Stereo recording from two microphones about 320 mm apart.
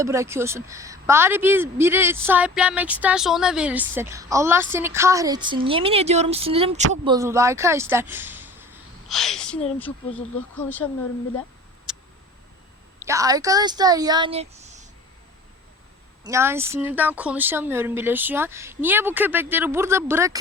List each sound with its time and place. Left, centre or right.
0.0 s a woman's voice: centre
11.9 s tick: centre
13.1 s a woman's voice: centre
16.2 s a woman's voice: centre